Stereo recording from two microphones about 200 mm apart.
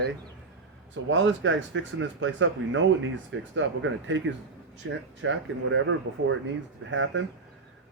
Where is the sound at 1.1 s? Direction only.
70° right (ahead or behind).